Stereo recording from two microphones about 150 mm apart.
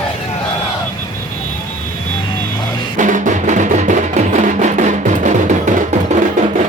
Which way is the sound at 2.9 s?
60° right (ahead or behind).